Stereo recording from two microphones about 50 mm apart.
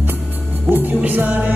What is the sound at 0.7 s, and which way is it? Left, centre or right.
Music, right.